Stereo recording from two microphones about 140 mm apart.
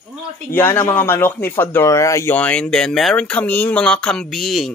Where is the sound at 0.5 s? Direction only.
15° left (ahead or behind).